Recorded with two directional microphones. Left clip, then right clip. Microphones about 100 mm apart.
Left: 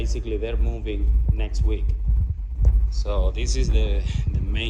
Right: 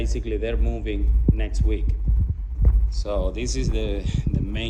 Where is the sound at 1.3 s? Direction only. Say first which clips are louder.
Right 2 dB; 25° left (ahead or behind).